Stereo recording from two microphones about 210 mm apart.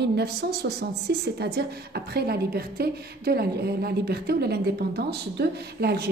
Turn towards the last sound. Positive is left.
turn(degrees=-50)  # may be behind; listen again after turning